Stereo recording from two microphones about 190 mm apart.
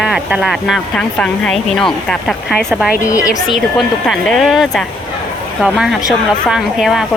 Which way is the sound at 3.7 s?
Centre (ahead or behind).